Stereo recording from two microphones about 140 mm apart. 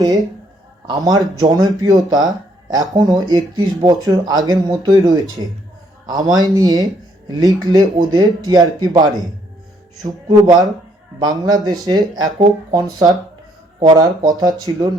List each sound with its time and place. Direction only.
0.9 s speech: 25° right (ahead or behind)